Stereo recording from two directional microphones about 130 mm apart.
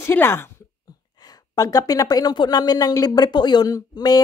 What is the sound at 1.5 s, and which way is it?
Speech, 25° left (ahead or behind).